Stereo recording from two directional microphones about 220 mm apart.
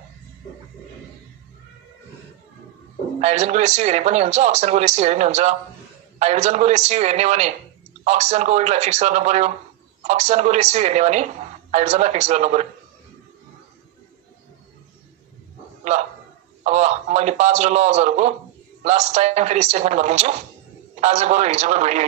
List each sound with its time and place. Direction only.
3.2 s speech: 30° right (ahead or behind)
15.8 s bow-wow: 30° right (ahead or behind)
16.6 s speech: 30° right (ahead or behind)